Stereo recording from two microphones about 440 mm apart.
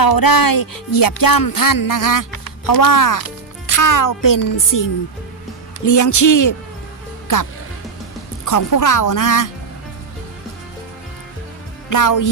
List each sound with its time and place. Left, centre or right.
0.0 s music: left
5.8 s a man's voice: left
8.4 s music: left
11.9 s music: left